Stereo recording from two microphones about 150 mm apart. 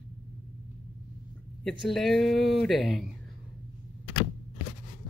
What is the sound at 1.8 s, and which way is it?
Speech, centre (ahead or behind).